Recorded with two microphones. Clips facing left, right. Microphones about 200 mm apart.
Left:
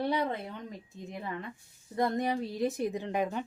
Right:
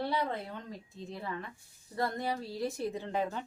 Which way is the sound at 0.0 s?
15° left (ahead or behind).